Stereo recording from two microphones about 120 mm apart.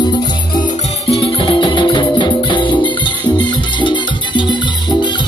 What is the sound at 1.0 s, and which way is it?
Music, 50° left (ahead or behind).